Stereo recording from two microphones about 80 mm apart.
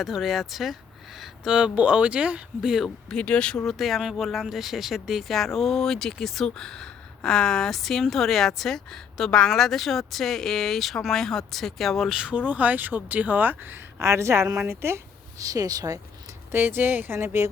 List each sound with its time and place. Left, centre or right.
0.0 s speech: centre
3.1 s speech: centre
3.7 s speech: centre; by 16.0 s right
16.5 s speech: right